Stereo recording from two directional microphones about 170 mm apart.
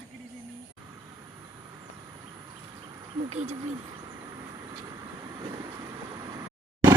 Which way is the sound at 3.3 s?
40° right (ahead or behind).